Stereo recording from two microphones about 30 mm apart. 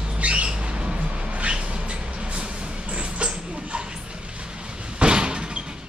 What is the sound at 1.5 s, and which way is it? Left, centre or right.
Train, right.